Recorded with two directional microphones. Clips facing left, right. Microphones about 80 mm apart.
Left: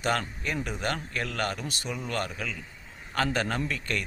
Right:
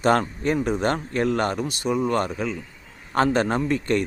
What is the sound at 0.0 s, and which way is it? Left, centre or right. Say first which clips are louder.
A man's voice: right 9 dB; right.